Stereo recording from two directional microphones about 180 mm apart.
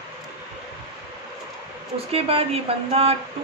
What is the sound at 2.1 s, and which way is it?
Speech, 35° right (ahead or behind).